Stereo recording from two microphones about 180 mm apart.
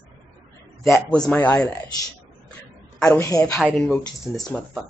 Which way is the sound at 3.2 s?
20° left (ahead or behind).